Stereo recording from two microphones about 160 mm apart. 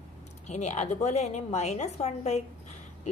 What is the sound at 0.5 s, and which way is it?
A woman's voice, 45° left (ahead or behind).